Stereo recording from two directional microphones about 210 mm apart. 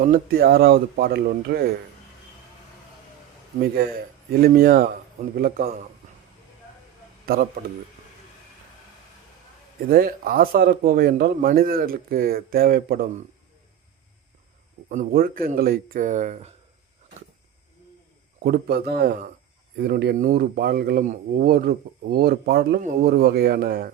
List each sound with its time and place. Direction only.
0.0 s speech: 45° right (ahead or behind)
3.8 s speech: 45° right (ahead or behind)
9.9 s speech: 45° right (ahead or behind)
14.8 s speech: 40° right (ahead or behind)
18.4 s speech: 45° right (ahead or behind)